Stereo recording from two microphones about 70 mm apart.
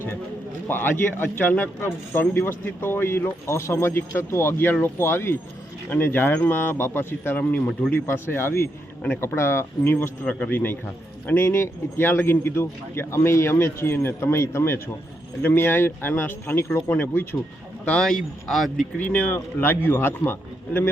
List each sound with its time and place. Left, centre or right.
0.7 s speech: left
7.7 s speech: centre
8.1 s a man's voice: left
16.9 s a man's voice: left
17.8 s speech: centre
18.9 s a man's voice: left